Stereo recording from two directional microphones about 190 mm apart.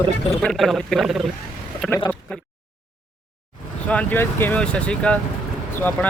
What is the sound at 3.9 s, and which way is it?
Speech, 10° left (ahead or behind).